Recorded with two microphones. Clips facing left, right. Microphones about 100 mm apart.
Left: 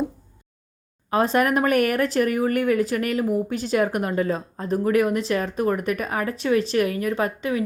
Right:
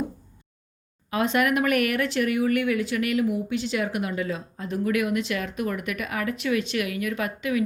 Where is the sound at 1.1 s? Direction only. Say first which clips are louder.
Left 3 dB; 35° left (ahead or behind).